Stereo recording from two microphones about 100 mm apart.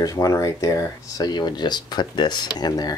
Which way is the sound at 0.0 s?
35° left (ahead or behind).